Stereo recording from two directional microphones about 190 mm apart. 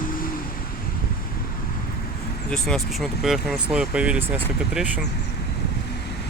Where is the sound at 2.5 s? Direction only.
Centre (ahead or behind).